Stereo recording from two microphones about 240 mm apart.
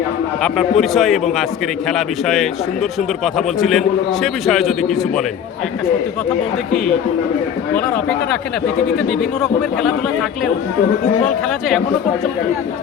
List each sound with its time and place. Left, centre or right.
0.4 s a man's voice: centre
9.4 s a man's voice: centre